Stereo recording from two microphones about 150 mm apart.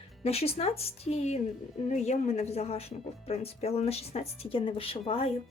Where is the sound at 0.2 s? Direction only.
40° left (ahead or behind).